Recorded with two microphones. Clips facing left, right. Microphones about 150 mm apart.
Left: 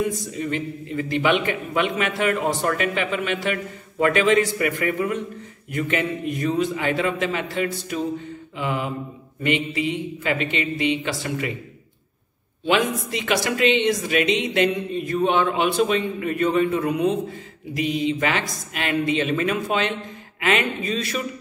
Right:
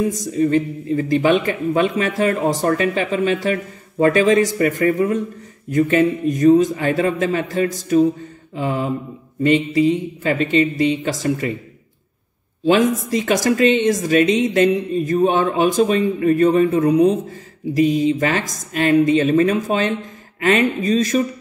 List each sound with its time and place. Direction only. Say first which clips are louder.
0.2 s speech: right 10 dB; 40° right (ahead or behind)
12.6 s speech: right 6 dB; 40° right (ahead or behind)